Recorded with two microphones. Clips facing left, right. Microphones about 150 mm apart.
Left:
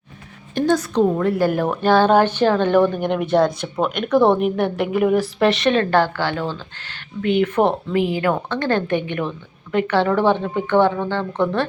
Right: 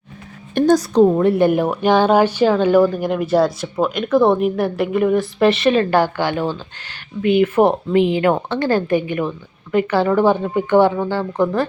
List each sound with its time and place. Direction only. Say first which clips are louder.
0.6 s a woman's voice: right 5 dB; 40° right (ahead or behind); by 7.7 s 5° right (ahead or behind)
7.9 s speech: right 4 dB; 20° right (ahead or behind)
8.5 s a woman's voice: right 3 dB; 5° right (ahead or behind)